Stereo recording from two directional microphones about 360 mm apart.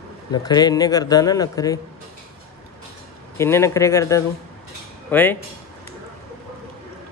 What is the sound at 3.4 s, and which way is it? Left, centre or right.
A man's voice, centre.